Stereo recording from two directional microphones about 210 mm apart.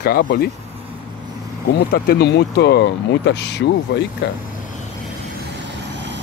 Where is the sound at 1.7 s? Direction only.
50° left (ahead or behind).